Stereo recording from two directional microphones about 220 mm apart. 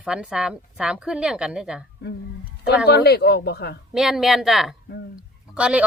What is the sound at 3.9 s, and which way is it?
A woman's voice, centre (ahead or behind).